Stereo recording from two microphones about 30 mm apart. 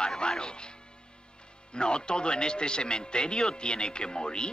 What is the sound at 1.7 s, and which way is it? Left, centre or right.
Speech, left.